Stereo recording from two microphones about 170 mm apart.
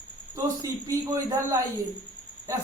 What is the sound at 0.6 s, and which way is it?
Speech, 20° right (ahead or behind).